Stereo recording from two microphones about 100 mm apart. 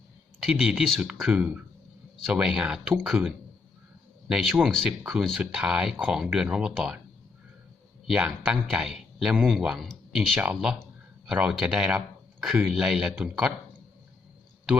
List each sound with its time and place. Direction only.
0.3 s speech: 5° right (ahead or behind)
8.0 s speech: 5° right (ahead or behind)